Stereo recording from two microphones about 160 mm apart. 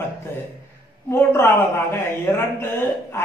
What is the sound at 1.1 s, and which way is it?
A man's voice, 15° left (ahead or behind).